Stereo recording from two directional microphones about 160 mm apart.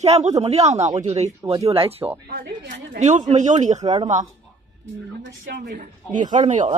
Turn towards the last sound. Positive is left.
turn(degrees=-50)  # may be behind; listen again after turning